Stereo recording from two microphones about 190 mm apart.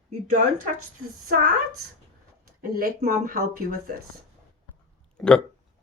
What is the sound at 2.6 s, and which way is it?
Speech, 50° right (ahead or behind).